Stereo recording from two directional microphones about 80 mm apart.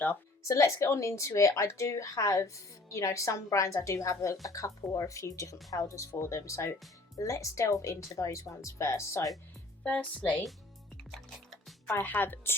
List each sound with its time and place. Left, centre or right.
0.4 s speech: left
9.8 s speech: centre
10.9 s music: centre
11.9 s speech: left